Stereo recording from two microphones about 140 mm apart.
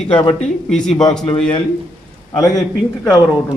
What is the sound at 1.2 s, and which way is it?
Speech, 10° left (ahead or behind).